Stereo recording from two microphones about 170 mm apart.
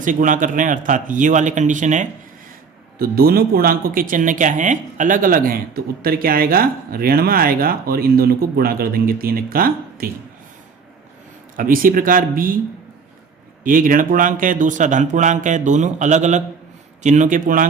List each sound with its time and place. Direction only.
0.0 s speech: 50° right (ahead or behind)
3.0 s speech: 60° right (ahead or behind)
11.5 s speech: 55° right (ahead or behind)
13.7 s speech: 55° right (ahead or behind)